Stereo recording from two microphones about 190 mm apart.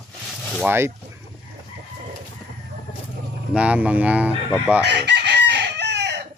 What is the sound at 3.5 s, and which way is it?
Speech, 5° right (ahead or behind).